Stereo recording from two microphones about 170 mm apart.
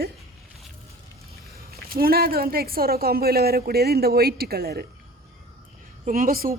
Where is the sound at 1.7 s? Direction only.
60° right (ahead or behind).